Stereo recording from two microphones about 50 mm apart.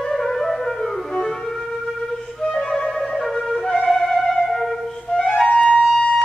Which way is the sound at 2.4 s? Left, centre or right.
Centre.